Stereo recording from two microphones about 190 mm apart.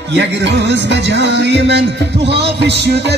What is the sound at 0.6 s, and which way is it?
Music, 65° right (ahead or behind).